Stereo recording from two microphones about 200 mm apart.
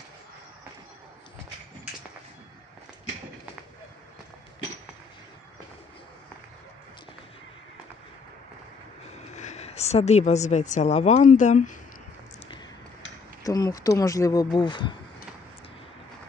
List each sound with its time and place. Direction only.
9.2 s a woman's voice: 35° left (ahead or behind)
13.4 s speech: 15° left (ahead or behind)